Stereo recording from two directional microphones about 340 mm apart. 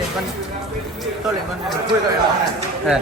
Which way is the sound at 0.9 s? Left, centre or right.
Centre.